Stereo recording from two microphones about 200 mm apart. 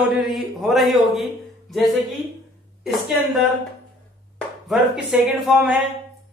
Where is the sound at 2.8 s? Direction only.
Centre (ahead or behind).